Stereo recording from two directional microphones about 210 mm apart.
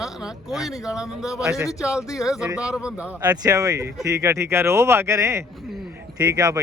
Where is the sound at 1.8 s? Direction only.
15° left (ahead or behind).